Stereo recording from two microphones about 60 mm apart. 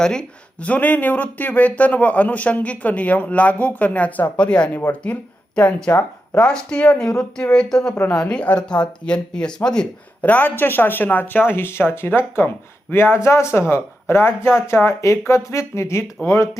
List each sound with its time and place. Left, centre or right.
0.0 s speech: centre
7.5 s speech: centre
10.2 s a man's voice: left